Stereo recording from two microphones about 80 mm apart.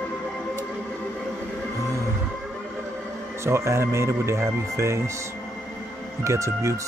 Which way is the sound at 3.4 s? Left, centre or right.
Right.